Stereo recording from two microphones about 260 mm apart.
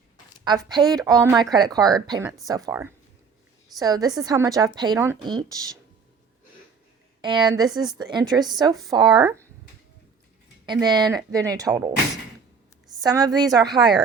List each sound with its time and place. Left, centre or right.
0.4 s a woman's voice: centre
1.8 s speech: centre
2.0 s a woman's voice: centre
7.2 s a woman's voice: centre
10.7 s a woman's voice: centre
13.0 s a woman's voice: centre